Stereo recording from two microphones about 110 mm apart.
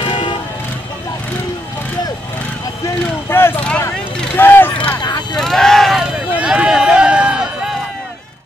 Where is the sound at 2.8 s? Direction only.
20° left (ahead or behind).